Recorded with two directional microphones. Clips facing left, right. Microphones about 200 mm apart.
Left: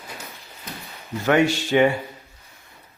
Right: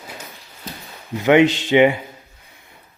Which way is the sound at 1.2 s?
20° right (ahead or behind).